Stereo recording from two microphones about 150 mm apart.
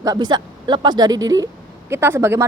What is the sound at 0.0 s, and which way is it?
Speech, 25° right (ahead or behind).